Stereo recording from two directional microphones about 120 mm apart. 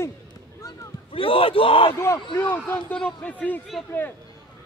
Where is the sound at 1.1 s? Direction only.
50° left (ahead or behind).